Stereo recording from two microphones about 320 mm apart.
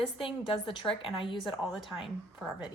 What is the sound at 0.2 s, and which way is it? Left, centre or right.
A woman's voice, centre.